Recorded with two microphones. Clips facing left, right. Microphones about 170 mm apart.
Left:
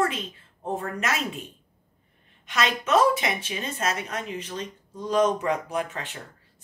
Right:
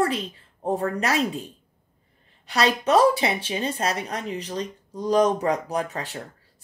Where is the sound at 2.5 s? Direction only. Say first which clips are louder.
Right 3 dB; 35° right (ahead or behind).